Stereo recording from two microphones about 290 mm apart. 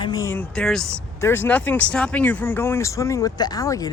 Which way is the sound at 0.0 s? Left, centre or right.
Centre.